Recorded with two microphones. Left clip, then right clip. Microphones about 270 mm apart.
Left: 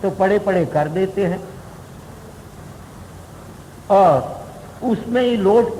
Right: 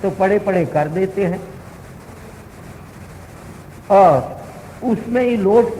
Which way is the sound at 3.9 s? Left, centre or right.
Left.